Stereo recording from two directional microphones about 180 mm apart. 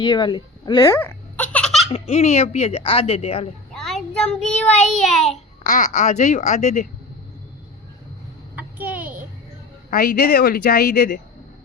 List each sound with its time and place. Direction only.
0.0 s speech: 25° left (ahead or behind); by 1.9 s centre (ahead or behind)
1.9 s speech: 35° left (ahead or behind)
3.8 s child singing: 5° left (ahead or behind)
5.6 s speech: 45° left (ahead or behind)
8.5 s a sound: 10° right (ahead or behind)
9.9 s a woman's voice: 55° left (ahead or behind)